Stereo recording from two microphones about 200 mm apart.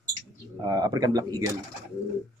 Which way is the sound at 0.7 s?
20° right (ahead or behind).